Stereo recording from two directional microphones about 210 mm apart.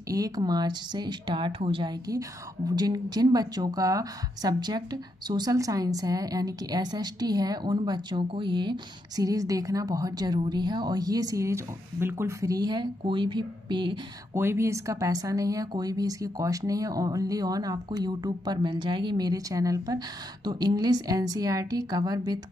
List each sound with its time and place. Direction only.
0.1 s a woman's voice: 20° right (ahead or behind)